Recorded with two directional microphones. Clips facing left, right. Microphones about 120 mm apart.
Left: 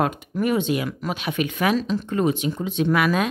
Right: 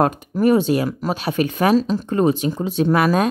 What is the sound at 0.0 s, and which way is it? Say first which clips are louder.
Speech: right 6 dB; 40° right (ahead or behind).